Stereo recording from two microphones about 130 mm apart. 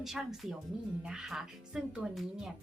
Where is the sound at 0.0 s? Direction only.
Centre (ahead or behind).